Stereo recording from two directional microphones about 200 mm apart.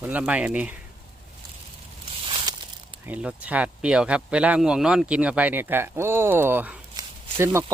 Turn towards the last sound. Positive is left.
turn(degrees=-15)  # may be behind; listen again after turning